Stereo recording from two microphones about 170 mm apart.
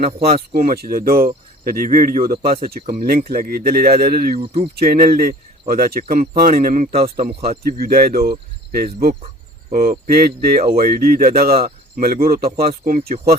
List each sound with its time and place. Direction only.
0.3 s speech: 60° right (ahead or behind)